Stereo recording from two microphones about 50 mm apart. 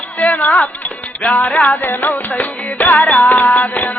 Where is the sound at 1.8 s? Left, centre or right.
Left.